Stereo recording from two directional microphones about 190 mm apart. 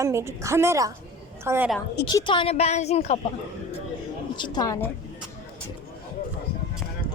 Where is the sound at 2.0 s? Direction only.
25° left (ahead or behind).